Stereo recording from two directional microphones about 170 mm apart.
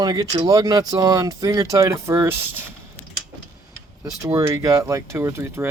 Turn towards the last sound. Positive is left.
turn(degrees=-15)  # may be behind; listen again after turning